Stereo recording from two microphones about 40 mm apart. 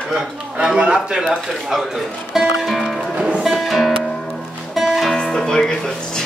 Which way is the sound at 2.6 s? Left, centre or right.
Centre.